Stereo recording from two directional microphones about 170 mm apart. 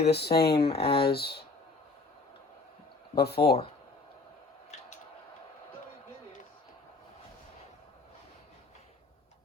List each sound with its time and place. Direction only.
0.0 s speech: 75° left (ahead or behind)
0.5 s speech: 35° left (ahead or behind)
1.1 s speech: 70° left (ahead or behind)
3.2 s speech: 70° left (ahead or behind)